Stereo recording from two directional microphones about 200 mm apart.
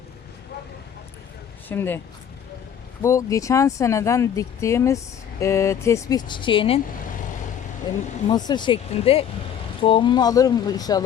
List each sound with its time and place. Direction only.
1.6 s speech: 10° left (ahead or behind)
3.0 s speech: 15° left (ahead or behind)
7.9 s speech: 20° left (ahead or behind)